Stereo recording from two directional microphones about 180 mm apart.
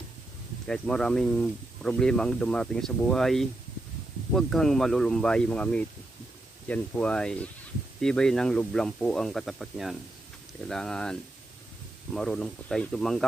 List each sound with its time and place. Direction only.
0.7 s speech: 5° left (ahead or behind)